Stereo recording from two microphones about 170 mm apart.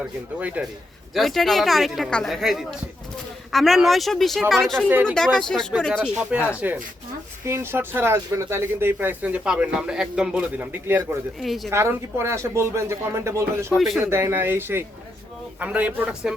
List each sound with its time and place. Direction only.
0.0 s speech: 10° right (ahead or behind)
4.9 s speech: 10° right (ahead or behind)
5.1 s speech: 5° left (ahead or behind)
6.6 s speech: 10° right (ahead or behind)
11.3 s speech: centre (ahead or behind)
11.7 s speech: 15° right (ahead or behind)
13.7 s speech: centre (ahead or behind)
14.0 s speech: 15° right (ahead or behind)